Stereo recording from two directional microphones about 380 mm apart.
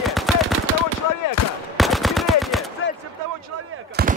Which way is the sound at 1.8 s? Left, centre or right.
Centre.